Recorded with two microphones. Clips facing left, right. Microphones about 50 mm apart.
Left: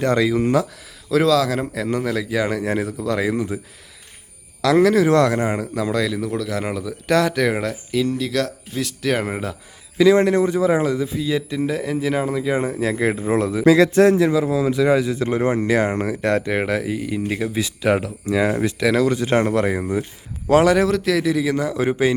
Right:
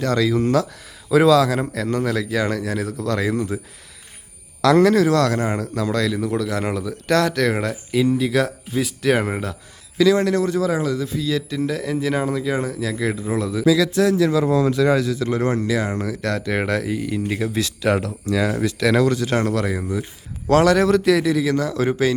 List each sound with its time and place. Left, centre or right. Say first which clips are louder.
0.0 s a man's voice: left 1 dB; left
1.1 s a man's voice: right 2 dB; centre
4.6 s a man's voice: right 1 dB; centre
5.0 s a man's voice: left 2 dB; left; by 9.6 s centre
10.0 s a man's voice: left 2 dB; left
14.4 s speech: right 1 dB; centre
15.1 s a man's voice: left 1 dB; left
15.6 s speech: left 3 dB; left
16.5 s speech: even; centre; by 18.7 s left
18.8 s speech: right 1 dB; centre
19.1 s a man's voice: left 2 dB; left
20.5 s speech: even; centre